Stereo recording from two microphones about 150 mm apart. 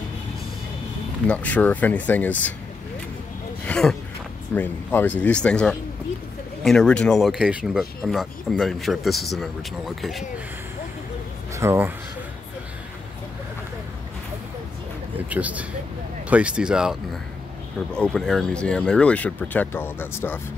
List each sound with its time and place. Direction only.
1.2 s speech: 10° left (ahead or behind)
3.6 s speech: 5° left (ahead or behind)
11.5 s speech: 20° right (ahead or behind)
15.2 s speech: 10° right (ahead or behind)
17.9 s speech: 5° left (ahead or behind)